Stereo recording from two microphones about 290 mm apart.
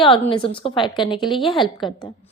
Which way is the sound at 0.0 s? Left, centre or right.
Centre.